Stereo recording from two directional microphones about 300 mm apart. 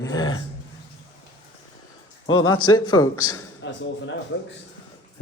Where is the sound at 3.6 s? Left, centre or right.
Left.